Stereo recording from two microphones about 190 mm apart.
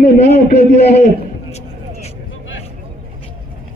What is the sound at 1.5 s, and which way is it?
Vehicle, 35° left (ahead or behind).